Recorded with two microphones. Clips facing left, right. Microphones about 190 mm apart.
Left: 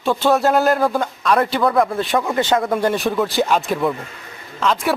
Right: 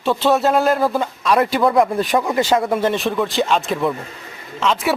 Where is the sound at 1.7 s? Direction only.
15° right (ahead or behind).